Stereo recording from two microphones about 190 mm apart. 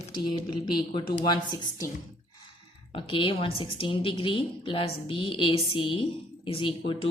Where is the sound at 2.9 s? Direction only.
25° left (ahead or behind).